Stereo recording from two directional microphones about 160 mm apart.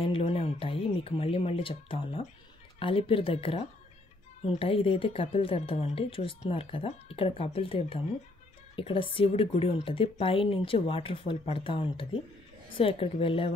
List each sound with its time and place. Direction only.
0.0 s speech: 35° left (ahead or behind)